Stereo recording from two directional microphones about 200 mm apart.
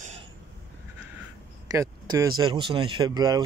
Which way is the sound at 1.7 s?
15° right (ahead or behind).